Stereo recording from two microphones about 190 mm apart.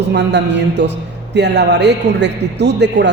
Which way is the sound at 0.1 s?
65° right (ahead or behind).